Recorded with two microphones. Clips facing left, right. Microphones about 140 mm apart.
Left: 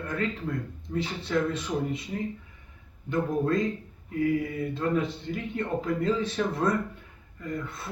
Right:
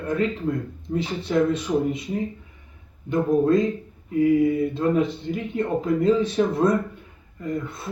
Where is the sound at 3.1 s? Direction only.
15° right (ahead or behind).